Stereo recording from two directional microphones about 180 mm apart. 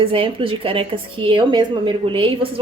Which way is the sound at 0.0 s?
30° right (ahead or behind).